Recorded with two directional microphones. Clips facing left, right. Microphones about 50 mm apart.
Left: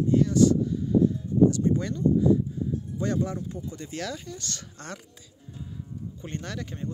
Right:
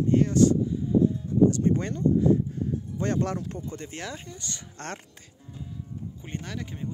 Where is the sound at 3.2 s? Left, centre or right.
Right.